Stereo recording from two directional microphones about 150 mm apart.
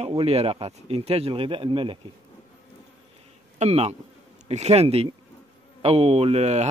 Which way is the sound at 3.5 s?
45° right (ahead or behind).